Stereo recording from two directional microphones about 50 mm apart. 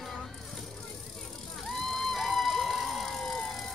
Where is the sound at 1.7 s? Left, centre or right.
Centre.